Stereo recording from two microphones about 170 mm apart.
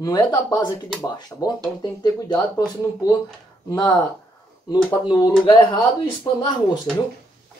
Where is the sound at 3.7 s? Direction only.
25° left (ahead or behind).